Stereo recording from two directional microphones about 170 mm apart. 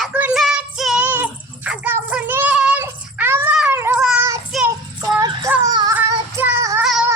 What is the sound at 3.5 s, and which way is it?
Cat, 10° right (ahead or behind).